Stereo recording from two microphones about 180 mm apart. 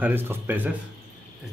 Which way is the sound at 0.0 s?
10° right (ahead or behind).